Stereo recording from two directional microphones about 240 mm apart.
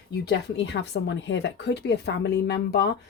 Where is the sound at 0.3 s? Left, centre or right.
Left.